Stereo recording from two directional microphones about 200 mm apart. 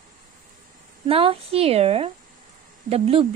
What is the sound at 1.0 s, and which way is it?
A woman's voice, 30° right (ahead or behind).